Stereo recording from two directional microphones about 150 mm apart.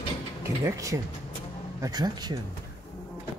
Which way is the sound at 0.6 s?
20° right (ahead or behind).